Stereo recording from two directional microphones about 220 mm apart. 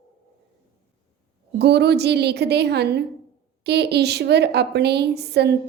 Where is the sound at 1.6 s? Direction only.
50° right (ahead or behind).